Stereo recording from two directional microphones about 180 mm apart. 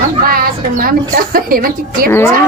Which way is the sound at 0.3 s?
55° right (ahead or behind).